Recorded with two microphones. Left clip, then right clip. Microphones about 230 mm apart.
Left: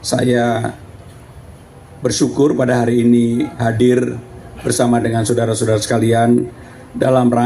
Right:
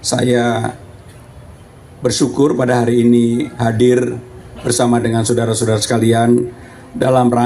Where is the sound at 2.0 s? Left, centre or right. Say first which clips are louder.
Right 1 dB; right.